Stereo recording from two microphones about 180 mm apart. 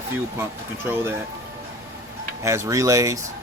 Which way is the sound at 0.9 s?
10° right (ahead or behind).